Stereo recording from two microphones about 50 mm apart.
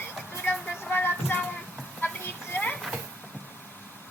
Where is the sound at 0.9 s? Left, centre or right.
Left.